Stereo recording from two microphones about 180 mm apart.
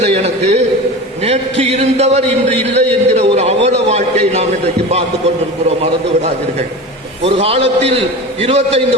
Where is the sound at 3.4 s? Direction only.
35° right (ahead or behind).